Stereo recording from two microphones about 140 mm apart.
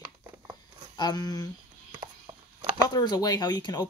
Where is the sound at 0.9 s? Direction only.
30° left (ahead or behind).